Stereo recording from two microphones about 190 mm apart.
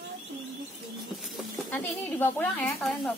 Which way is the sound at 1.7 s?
10° left (ahead or behind).